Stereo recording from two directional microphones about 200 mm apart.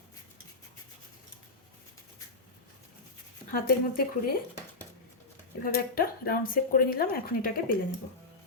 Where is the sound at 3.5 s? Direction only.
45° left (ahead or behind).